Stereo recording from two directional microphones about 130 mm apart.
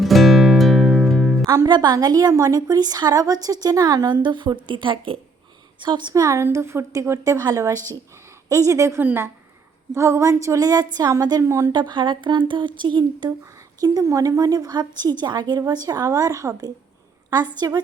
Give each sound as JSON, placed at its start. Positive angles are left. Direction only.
{"t": 0.0, "sound": "music", "side_deg": 0}
{"t": 1.5, "sound": "a woman's voice", "side_deg": -30}
{"t": 13.8, "sound": "a woman's voice", "side_deg": -25}